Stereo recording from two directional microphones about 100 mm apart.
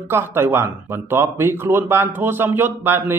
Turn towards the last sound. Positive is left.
turn(degrees=-20)  # may be behind; listen again after turning